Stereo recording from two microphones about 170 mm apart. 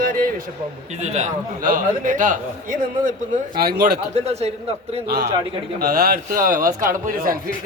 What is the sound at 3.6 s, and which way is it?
Speech, 70° right (ahead or behind).